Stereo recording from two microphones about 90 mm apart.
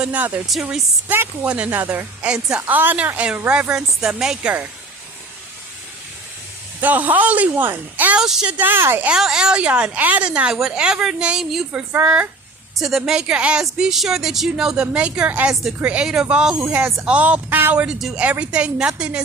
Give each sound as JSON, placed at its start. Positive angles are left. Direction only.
{"t": 0.0, "sound": "a woman's voice", "side_deg": -15}
{"t": 6.8, "sound": "speech", "side_deg": -20}
{"t": 8.2, "sound": "speech", "side_deg": -5}
{"t": 8.5, "sound": "speech", "side_deg": -20}
{"t": 9.0, "sound": "a woman's voice", "side_deg": -5}
{"t": 12.7, "sound": "a woman's voice", "side_deg": 0}
{"t": 16.6, "sound": "a woman's voice", "side_deg": -15}
{"t": 17.8, "sound": "a woman's voice", "side_deg": -10}